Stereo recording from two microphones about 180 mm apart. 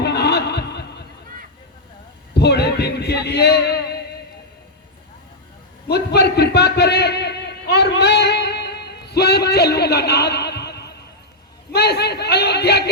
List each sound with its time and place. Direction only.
0.0 s snicker: 65° left (ahead or behind)
2.3 s a man's voice: 65° left (ahead or behind)
5.9 s a sound: 65° left (ahead or behind)
11.7 s a man's voice: 65° left (ahead or behind)